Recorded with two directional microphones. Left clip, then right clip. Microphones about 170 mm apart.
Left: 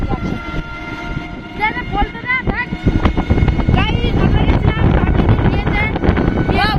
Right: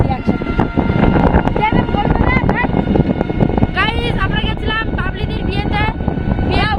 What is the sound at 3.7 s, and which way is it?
Vehicle, 20° right (ahead or behind).